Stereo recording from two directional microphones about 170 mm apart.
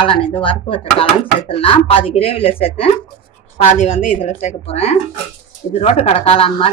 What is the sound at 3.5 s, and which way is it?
A woman's voice, 50° left (ahead or behind).